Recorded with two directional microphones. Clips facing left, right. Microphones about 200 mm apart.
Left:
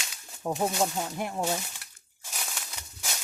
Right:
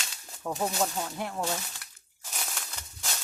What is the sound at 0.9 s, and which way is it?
Speech, 15° left (ahead or behind).